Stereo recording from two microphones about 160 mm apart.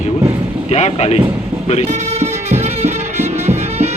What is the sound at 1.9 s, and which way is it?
Music, 45° right (ahead or behind).